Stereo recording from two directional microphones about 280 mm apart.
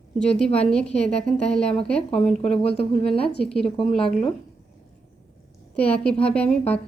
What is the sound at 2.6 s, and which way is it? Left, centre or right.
Speech, left.